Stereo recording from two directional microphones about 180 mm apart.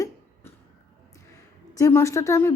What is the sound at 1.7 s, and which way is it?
Speech, 15° left (ahead or behind).